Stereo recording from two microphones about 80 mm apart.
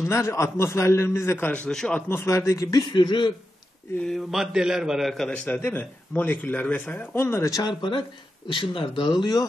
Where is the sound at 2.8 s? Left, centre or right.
Left.